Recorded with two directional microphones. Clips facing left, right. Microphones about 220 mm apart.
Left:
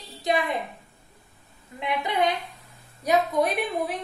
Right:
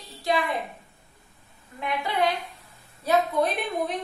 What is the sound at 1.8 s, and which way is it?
A woman's voice, 20° left (ahead or behind).